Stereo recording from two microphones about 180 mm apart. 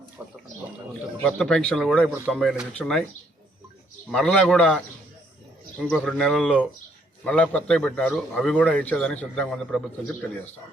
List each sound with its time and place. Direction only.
0.2 s a sound: 10° right (ahead or behind)
1.4 s speech: 5° left (ahead or behind)
4.1 s speech: 5° left (ahead or behind)
5.8 s a man's voice: centre (ahead or behind)